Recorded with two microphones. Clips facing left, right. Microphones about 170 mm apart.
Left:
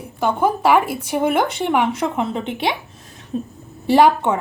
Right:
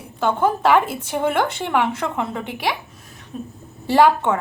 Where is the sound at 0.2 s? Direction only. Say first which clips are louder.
Left 1 dB; 10° left (ahead or behind); by 3.5 s 30° left (ahead or behind).